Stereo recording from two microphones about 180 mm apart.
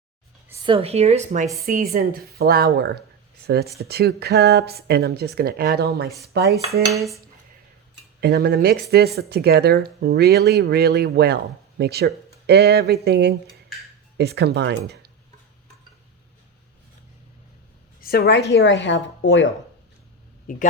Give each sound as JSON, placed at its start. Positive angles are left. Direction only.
{"t": 0.6, "sound": "a woman's voice", "side_deg": -30}
{"t": 1.6, "sound": "a woman's voice", "side_deg": -50}
{"t": 8.2, "sound": "speech", "side_deg": -60}
{"t": 18.0, "sound": "a woman's voice", "side_deg": 60}
{"t": 18.6, "sound": "a woman's voice", "side_deg": 90}
{"t": 20.5, "sound": "speech", "side_deg": 50}